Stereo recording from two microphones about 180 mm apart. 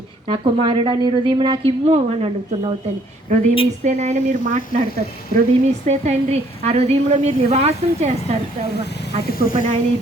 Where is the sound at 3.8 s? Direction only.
40° right (ahead or behind).